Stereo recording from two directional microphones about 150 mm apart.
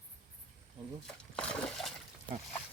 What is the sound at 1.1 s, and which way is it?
Splash, 5° left (ahead or behind).